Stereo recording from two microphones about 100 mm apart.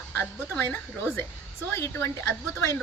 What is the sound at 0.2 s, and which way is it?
A woman's voice, 20° left (ahead or behind).